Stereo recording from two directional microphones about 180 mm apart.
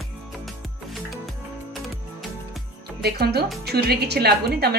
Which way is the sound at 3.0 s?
65° right (ahead or behind).